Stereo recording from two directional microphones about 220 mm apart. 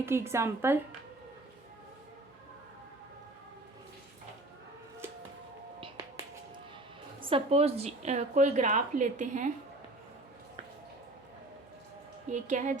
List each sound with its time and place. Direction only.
0.0 s a woman's voice: 10° right (ahead or behind)
7.3 s a woman's voice: 25° right (ahead or behind)
12.3 s a woman's voice: 35° right (ahead or behind)